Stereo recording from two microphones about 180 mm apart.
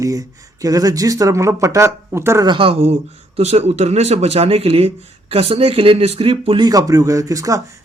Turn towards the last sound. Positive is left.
turn(degrees=-20)  # may be behind; listen again after turning